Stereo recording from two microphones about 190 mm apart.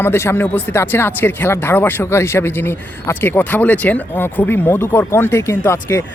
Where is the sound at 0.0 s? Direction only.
10° left (ahead or behind).